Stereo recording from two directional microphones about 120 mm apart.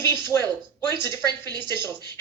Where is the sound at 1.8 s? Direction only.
25° left (ahead or behind).